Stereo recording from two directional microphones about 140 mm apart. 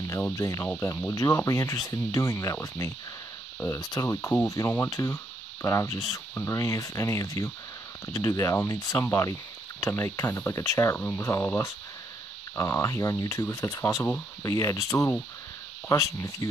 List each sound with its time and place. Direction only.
0.4 s speech: 25° left (ahead or behind)